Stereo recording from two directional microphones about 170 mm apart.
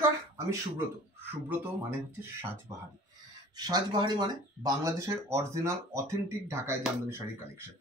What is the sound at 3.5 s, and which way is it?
Speech, 25° right (ahead or behind).